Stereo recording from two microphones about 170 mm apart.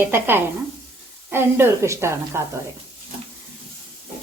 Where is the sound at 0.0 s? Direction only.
15° right (ahead or behind).